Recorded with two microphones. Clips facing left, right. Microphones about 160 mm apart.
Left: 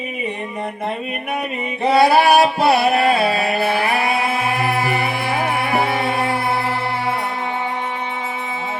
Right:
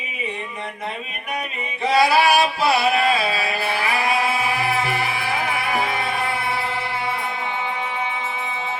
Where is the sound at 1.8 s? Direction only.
55° left (ahead or behind).